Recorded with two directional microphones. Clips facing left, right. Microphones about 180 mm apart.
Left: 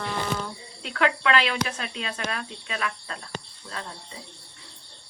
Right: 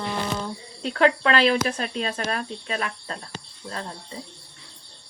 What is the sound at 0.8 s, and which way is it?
Speech, 35° right (ahead or behind).